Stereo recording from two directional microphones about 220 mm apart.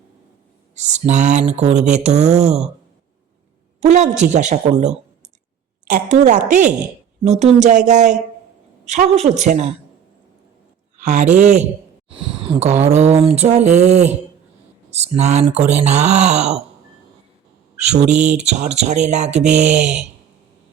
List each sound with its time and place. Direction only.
0.8 s speech: 30° right (ahead or behind)
3.8 s speech: 30° right (ahead or behind)
5.9 s speech: 35° right (ahead or behind)
11.0 s speech: 30° right (ahead or behind)
17.8 s speech: 30° right (ahead or behind)